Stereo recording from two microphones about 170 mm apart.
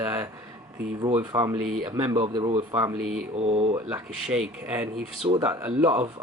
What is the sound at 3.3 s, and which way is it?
Speech, 35° right (ahead or behind).